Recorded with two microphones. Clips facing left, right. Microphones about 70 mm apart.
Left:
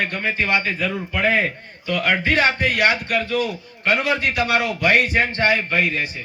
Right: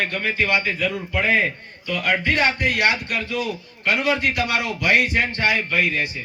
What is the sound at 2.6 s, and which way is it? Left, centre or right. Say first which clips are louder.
A man's voice: left 2 dB; left.